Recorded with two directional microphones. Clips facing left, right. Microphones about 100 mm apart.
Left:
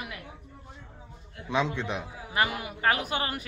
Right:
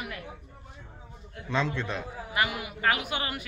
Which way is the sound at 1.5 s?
15° left (ahead or behind).